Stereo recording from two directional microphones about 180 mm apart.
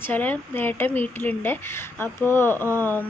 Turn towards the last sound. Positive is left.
turn(degrees=10)  # may be behind; listen again after turning